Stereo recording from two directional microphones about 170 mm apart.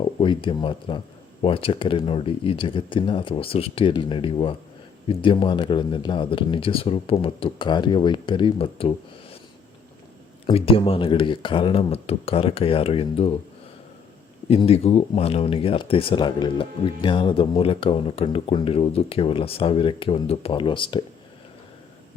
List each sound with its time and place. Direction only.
0.0 s speech: 30° left (ahead or behind)
10.4 s speech: 30° left (ahead or behind)
14.4 s speech: 35° left (ahead or behind)